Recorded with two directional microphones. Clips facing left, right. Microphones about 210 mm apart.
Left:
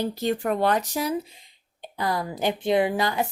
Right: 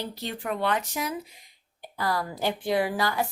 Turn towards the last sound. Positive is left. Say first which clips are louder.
# left 3 dB
turn(degrees=20)  # may be behind; listen again after turning